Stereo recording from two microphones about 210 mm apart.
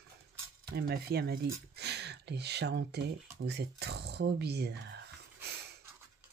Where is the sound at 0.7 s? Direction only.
50° right (ahead or behind).